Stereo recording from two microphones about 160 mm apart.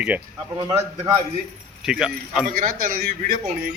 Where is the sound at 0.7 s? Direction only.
15° right (ahead or behind).